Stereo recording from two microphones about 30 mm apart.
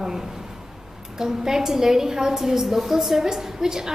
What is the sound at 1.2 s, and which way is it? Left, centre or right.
A woman's voice, centre.